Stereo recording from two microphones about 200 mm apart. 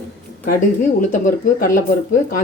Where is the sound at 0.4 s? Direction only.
45° left (ahead or behind).